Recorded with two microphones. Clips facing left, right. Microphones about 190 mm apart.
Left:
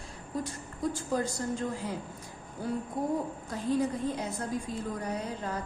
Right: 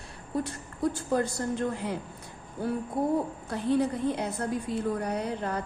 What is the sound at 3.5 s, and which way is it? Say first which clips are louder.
A woman's voice: right 3 dB; 65° right (ahead or behind).